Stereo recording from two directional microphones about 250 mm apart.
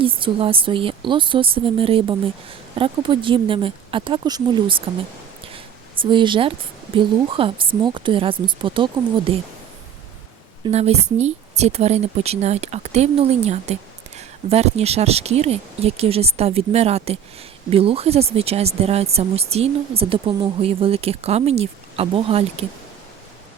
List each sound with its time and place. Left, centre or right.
0.0 s speech: right
5.5 s a sound: centre
6.9 s speech: right
10.7 s speech: right